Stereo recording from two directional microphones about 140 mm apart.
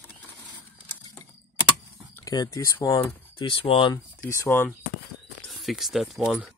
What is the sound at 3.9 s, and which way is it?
Speech, 20° left (ahead or behind).